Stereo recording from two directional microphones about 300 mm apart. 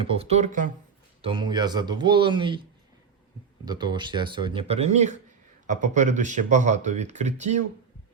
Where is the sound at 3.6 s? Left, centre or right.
Centre.